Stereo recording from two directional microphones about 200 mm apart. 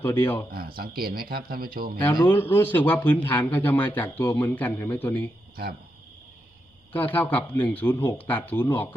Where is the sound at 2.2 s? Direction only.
10° left (ahead or behind).